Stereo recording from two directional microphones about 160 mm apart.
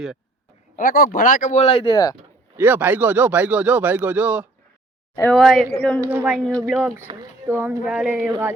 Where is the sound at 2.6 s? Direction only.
10° right (ahead or behind); by 6.0 s 10° left (ahead or behind).